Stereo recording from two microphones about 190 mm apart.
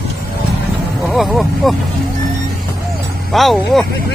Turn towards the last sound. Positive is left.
turn(degrees=0)  # may be behind; listen again after turning